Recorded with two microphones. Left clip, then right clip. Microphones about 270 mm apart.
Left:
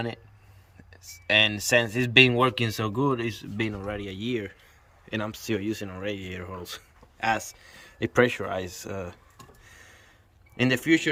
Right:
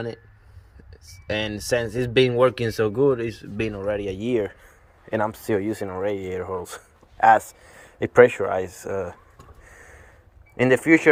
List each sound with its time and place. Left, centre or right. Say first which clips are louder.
1.3 s speech: left 3 dB; centre
4.3 s speech: right 8 dB; centre
9.6 s gasp: right 4 dB; centre
10.6 s speech: right 6 dB; centre